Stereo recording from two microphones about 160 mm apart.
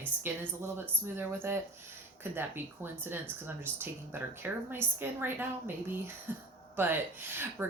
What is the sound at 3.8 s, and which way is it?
Speech, 15° right (ahead or behind).